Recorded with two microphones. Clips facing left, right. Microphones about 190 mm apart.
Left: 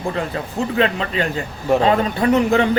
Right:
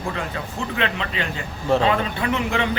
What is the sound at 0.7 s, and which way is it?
A man's voice, 40° left (ahead or behind).